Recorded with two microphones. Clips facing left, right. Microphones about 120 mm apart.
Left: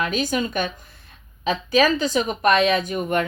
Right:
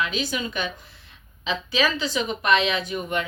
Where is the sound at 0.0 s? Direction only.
45° left (ahead or behind).